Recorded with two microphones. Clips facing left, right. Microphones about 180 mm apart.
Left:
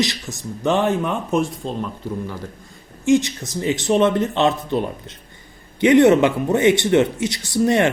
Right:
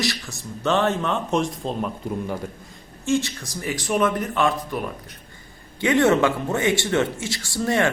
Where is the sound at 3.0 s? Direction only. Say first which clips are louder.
Left 6 dB; 20° left (ahead or behind).